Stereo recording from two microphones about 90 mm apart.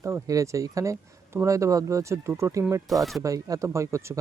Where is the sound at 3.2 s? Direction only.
40° right (ahead or behind).